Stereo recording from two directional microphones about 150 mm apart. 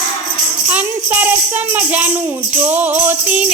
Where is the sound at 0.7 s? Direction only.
10° right (ahead or behind).